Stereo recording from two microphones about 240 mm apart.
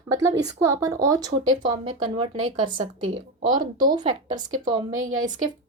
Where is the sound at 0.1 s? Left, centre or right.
Centre.